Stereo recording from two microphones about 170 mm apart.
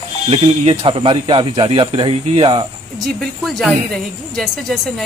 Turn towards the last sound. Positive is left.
turn(degrees=5)  # may be behind; listen again after turning